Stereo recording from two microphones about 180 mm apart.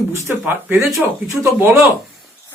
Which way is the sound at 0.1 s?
15° right (ahead or behind).